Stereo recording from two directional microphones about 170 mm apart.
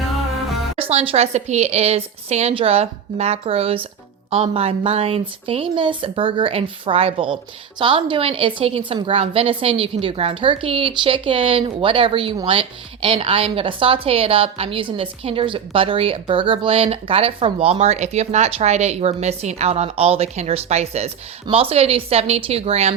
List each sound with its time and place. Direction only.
0.8 s a woman's voice: 35° right (ahead or behind)